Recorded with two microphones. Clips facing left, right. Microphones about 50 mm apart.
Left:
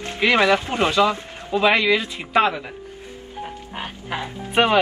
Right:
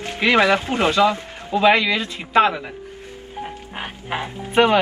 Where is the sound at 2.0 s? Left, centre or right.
Centre.